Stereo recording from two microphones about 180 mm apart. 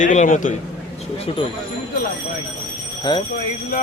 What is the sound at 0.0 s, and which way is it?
Speech, 45° left (ahead or behind).